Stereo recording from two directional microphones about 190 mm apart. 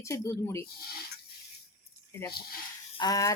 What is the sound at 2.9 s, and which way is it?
Speech, 20° left (ahead or behind).